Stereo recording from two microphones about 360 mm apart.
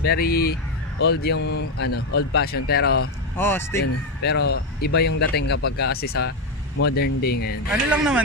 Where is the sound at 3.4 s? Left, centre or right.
Centre.